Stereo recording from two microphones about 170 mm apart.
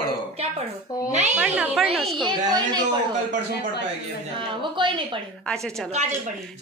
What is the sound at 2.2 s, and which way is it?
Speech, 25° right (ahead or behind).